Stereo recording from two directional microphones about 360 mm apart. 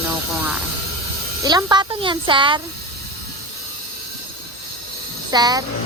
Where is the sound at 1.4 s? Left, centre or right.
Centre.